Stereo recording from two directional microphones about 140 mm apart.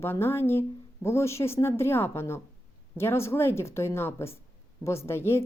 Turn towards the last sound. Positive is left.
turn(degrees=20)  # may be behind; listen again after turning